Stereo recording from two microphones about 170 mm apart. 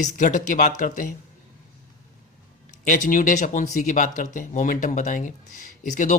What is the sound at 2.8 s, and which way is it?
Speech, 50° left (ahead or behind).